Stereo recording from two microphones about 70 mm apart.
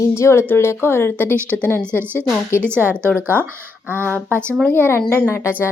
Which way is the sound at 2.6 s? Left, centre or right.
Right.